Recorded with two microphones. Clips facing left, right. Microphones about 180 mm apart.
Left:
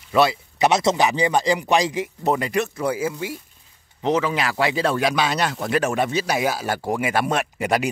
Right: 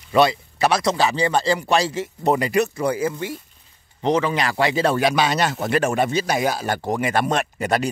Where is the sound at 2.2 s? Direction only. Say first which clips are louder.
Right 3 dB; centre (ahead or behind).